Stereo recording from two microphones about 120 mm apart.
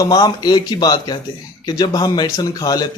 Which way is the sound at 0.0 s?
35° left (ahead or behind).